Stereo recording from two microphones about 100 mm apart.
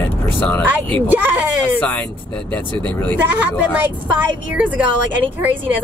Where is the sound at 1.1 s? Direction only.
20° right (ahead or behind).